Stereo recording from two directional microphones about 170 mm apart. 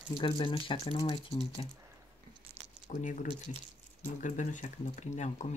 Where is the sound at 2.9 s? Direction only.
50° left (ahead or behind).